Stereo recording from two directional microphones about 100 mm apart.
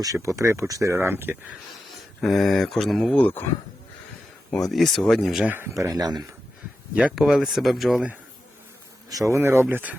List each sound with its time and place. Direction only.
0.0 s speech: 30° right (ahead or behind)
2.2 s speech: centre (ahead or behind)
3.2 s speech: 15° left (ahead or behind)
4.5 s speech: centre (ahead or behind)
5.5 s speech: 20° right (ahead or behind)
5.7 s speech: 35° right (ahead or behind)
7.2 s speech: 5° right (ahead or behind)
9.0 s speech: 35° right (ahead or behind)